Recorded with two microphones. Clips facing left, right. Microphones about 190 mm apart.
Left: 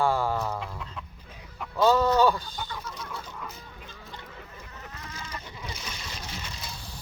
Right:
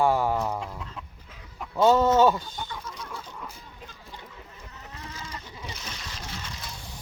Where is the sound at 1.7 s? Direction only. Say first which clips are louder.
Right 2 dB; 25° right (ahead or behind).